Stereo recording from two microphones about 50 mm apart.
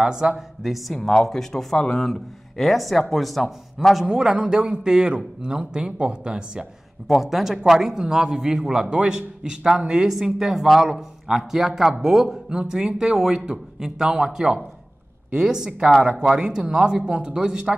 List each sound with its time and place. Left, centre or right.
0.0 s a man's voice: centre
0.9 s speech: centre
4.1 s a man's voice: centre
7.1 s a man's voice: centre
11.2 s a man's voice: centre